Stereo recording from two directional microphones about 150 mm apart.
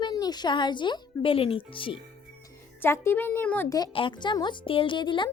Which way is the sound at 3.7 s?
25° left (ahead or behind).